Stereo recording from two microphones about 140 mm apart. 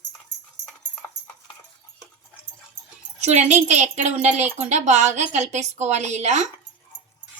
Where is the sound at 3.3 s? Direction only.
55° right (ahead or behind).